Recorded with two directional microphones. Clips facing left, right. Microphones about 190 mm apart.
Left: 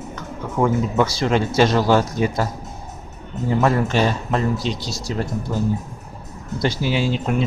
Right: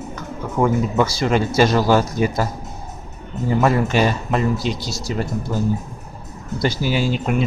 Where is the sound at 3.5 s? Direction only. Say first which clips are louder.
Right 1 dB; 5° right (ahead or behind).